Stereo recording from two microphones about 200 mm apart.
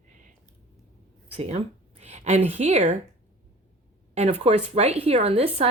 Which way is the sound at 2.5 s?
30° right (ahead or behind).